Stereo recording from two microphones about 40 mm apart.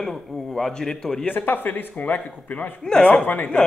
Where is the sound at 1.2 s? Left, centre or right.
Left.